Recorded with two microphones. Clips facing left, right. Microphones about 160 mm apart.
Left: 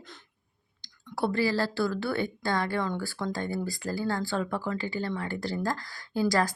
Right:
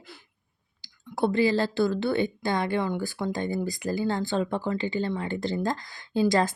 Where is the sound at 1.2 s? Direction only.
20° right (ahead or behind).